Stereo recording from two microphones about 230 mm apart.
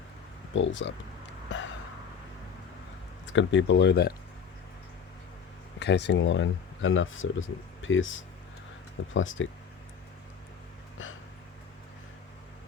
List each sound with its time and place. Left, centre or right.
0.5 s speech: left
1.5 s a sound: left
3.2 s speech: left
5.8 s speech: left